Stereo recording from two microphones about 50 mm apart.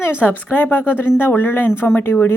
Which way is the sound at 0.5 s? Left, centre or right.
Left.